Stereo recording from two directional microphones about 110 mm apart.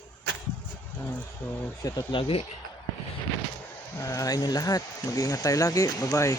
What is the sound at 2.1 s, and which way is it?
Speech, 55° left (ahead or behind).